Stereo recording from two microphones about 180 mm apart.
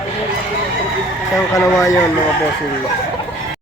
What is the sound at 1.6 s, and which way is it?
Speech, 15° left (ahead or behind).